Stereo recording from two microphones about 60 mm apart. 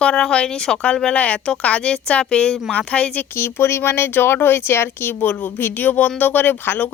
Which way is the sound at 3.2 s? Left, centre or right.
Left.